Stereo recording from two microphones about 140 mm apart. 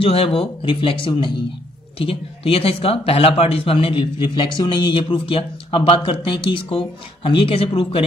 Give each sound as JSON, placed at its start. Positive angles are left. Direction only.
{"t": 0.0, "sound": "speech", "side_deg": 45}